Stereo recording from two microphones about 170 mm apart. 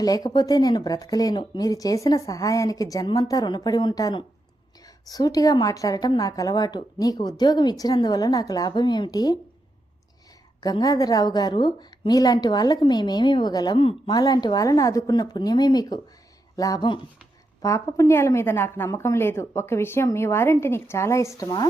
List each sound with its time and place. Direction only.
0.0 s a woman's voice: 20° left (ahead or behind)
10.6 s a woman's voice: 25° left (ahead or behind)